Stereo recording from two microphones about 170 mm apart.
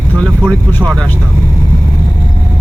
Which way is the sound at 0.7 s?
10° left (ahead or behind).